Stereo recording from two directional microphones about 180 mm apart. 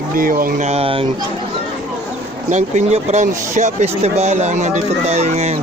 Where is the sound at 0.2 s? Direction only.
50° right (ahead or behind).